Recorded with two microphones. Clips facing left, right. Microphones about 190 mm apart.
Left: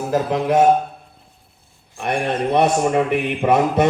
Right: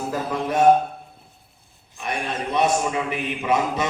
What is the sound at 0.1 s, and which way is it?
Speech, 75° left (ahead or behind).